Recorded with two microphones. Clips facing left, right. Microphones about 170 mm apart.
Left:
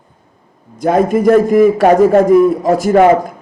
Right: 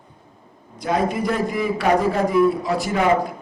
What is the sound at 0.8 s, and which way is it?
A man's voice, 50° left (ahead or behind).